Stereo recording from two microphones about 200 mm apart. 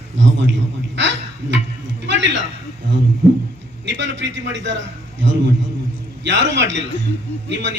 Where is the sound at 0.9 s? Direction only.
65° right (ahead or behind).